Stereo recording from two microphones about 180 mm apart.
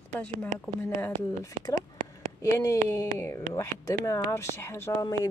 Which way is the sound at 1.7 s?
45° right (ahead or behind).